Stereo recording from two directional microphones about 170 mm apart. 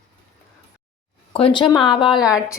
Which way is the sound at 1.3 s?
30° left (ahead or behind).